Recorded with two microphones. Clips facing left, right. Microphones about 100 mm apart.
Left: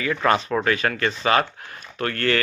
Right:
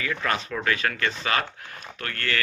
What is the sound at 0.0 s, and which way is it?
Speech, 35° left (ahead or behind).